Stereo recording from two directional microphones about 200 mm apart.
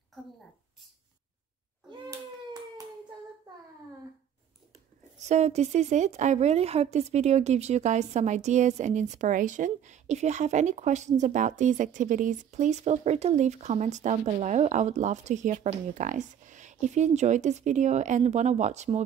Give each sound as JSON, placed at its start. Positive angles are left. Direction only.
{"t": 1.9, "sound": "cat", "side_deg": -20}
{"t": 5.2, "sound": "a woman's voice", "side_deg": -35}